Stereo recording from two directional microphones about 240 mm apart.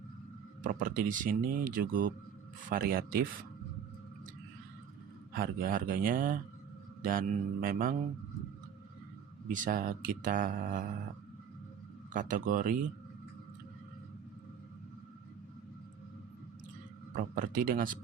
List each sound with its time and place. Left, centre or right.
0.6 s speech: right
5.3 s speech: right
9.5 s speech: right
12.1 s speech: right
17.2 s speech: right